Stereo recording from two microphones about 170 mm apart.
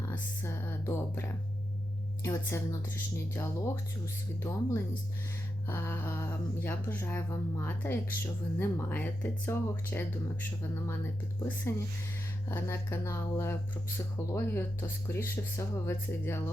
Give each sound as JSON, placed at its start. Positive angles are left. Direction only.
{"t": 0.1, "sound": "speech", "side_deg": 15}
{"t": 2.2, "sound": "speech", "side_deg": 15}
{"t": 11.7, "sound": "speech", "side_deg": 15}